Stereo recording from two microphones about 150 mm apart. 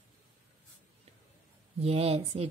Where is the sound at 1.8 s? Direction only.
40° right (ahead or behind).